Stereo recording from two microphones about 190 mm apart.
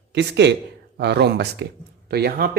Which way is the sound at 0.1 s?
65° right (ahead or behind).